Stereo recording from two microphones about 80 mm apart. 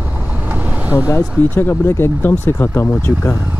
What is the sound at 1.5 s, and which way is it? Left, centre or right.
Speech, left.